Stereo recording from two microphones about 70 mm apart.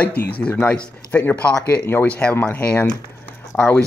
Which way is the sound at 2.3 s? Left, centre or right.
Left.